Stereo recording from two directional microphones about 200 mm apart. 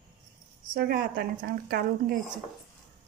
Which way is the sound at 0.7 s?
50° right (ahead or behind).